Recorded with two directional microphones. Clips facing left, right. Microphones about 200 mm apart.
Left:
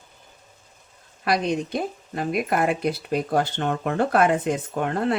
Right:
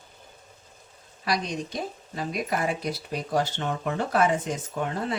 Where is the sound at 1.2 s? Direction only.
60° left (ahead or behind).